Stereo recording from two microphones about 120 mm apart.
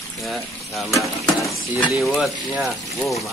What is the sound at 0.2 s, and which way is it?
Speech, centre (ahead or behind).